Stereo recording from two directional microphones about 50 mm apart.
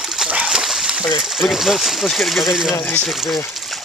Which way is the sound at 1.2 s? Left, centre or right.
Centre.